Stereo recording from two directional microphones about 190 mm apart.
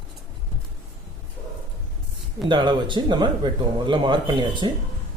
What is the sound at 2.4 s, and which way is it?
Speech, 25° right (ahead or behind).